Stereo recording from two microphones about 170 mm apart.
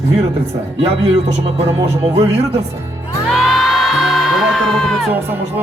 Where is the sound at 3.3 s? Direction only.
Centre (ahead or behind).